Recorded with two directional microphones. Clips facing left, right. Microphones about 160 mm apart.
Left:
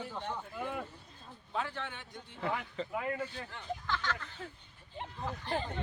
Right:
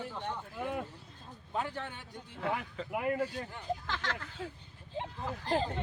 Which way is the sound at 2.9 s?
15° right (ahead or behind).